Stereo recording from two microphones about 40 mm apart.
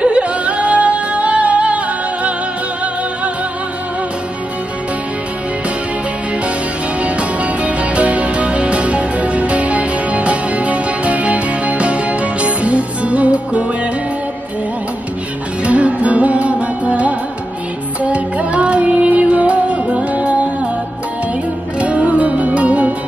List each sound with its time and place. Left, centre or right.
0.0 s music: right
7.0 s music: right
15.6 s music: right
21.7 s music: right